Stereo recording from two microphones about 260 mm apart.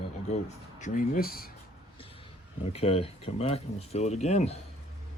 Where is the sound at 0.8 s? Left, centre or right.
Left.